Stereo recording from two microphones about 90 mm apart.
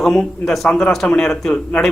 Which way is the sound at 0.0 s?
5° left (ahead or behind).